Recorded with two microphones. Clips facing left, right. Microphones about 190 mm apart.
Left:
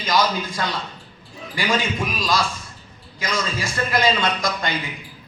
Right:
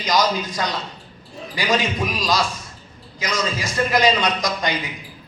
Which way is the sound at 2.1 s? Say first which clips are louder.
Even; 20° right (ahead or behind).